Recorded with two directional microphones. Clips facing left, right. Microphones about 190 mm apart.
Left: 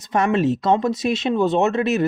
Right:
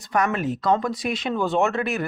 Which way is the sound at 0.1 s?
25° left (ahead or behind).